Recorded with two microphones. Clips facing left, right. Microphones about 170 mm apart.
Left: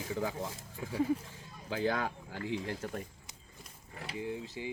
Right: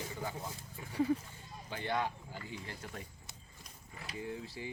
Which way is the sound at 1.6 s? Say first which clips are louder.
Left 4 dB; 90° left.